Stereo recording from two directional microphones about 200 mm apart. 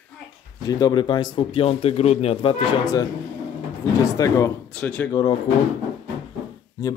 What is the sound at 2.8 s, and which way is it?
Speech, 20° left (ahead or behind).